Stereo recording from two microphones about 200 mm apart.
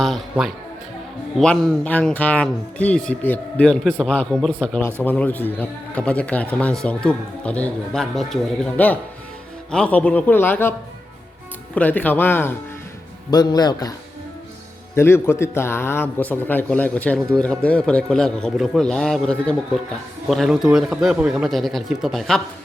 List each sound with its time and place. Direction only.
0.0 s a man's voice: centre (ahead or behind); by 13.9 s 20° left (ahead or behind)
14.9 s a man's voice: 10° left (ahead or behind)